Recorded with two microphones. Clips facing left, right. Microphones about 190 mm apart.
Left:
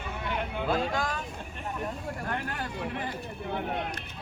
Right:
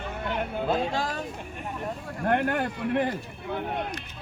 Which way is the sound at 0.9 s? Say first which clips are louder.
Right 2 dB; 30° right (ahead or behind).